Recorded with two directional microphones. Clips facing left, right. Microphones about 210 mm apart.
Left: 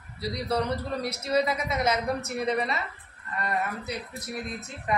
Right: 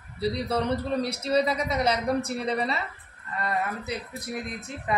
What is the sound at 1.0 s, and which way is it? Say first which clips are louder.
A woman's voice: left 1 dB; 30° right (ahead or behind).